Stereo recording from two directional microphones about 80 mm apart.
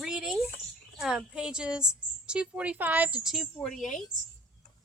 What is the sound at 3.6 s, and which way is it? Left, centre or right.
Speech, centre.